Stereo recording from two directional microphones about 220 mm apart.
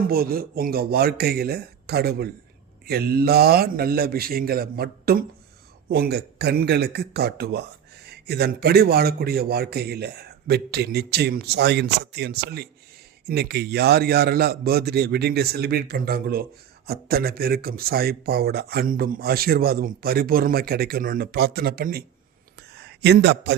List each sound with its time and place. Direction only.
0.1 s a man's voice: 40° right (ahead or behind)